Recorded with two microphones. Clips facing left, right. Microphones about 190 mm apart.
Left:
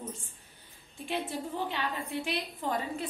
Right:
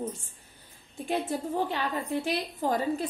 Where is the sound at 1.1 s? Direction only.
45° right (ahead or behind).